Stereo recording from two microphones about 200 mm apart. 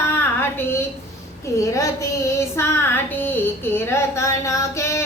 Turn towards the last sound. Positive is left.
turn(degrees=15)  # may be behind; listen again after turning